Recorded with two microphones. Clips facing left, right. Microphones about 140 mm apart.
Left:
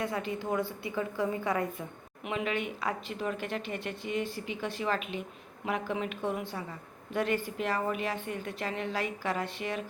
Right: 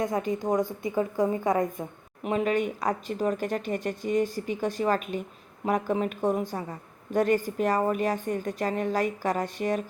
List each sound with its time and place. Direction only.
0.0 s a woman's voice: 45° right (ahead or behind)